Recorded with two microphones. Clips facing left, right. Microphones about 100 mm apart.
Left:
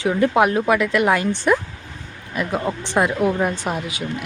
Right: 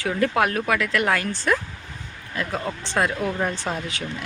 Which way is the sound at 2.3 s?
20° left (ahead or behind).